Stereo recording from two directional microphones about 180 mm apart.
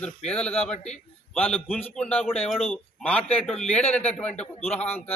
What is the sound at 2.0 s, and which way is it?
A man's voice, 10° left (ahead or behind).